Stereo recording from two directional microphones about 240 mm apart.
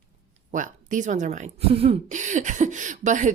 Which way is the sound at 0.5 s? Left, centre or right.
Right.